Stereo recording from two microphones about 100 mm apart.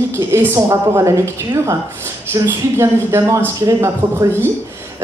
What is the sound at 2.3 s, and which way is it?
Speech, 25° right (ahead or behind).